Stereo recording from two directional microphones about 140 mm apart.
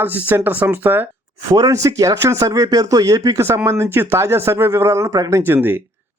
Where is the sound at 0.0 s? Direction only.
15° right (ahead or behind).